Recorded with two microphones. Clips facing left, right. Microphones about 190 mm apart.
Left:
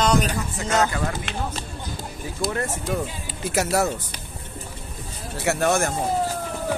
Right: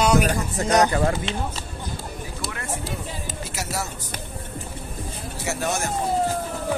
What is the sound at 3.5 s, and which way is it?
Speech, 55° left (ahead or behind).